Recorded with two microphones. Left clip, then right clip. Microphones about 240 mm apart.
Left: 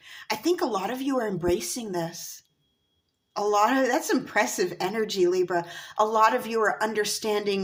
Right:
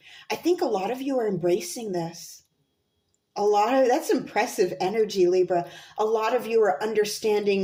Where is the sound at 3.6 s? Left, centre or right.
Left.